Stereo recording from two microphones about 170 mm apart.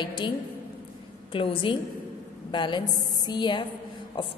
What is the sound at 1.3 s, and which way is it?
A woman's voice, 30° left (ahead or behind).